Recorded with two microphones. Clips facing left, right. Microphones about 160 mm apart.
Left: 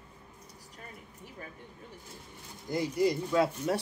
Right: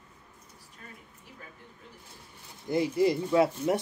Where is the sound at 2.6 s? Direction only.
25° right (ahead or behind).